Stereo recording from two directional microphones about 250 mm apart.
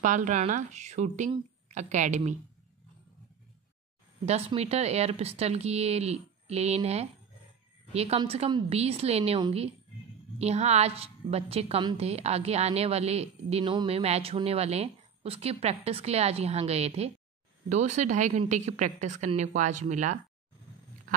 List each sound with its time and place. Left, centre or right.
0.0 s a woman's voice: right
4.3 s a woman's voice: right